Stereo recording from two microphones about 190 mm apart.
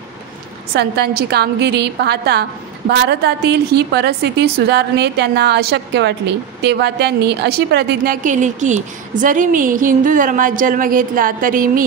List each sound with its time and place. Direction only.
0.7 s a woman's voice: 55° right (ahead or behind)